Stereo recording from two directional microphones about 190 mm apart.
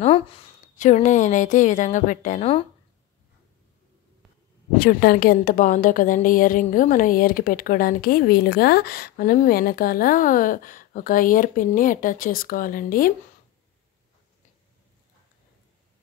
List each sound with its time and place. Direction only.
0.0 s speech: 30° left (ahead or behind)
4.7 s a woman's voice: 55° left (ahead or behind)